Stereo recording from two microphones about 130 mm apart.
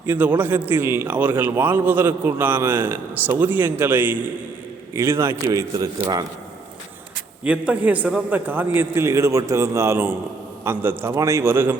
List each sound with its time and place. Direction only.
0.1 s a man's voice: 15° right (ahead or behind)
5.5 s a man's voice: 30° right (ahead or behind)
7.4 s a man's voice: 10° right (ahead or behind)